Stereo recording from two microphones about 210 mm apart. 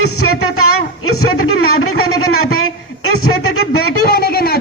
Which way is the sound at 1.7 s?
90° left.